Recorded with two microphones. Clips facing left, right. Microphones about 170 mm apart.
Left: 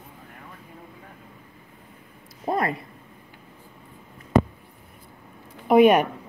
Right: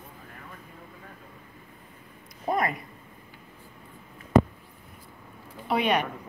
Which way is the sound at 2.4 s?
30° left (ahead or behind).